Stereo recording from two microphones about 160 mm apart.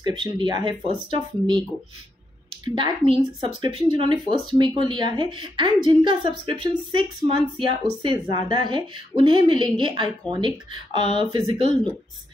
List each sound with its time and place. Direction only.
0.0 s speech: 30° right (ahead or behind)
2.7 s speech: 30° right (ahead or behind)